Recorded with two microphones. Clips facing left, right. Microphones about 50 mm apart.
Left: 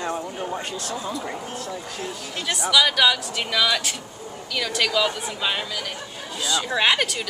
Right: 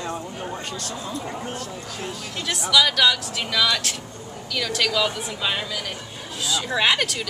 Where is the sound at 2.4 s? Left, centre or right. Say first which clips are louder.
Even; centre.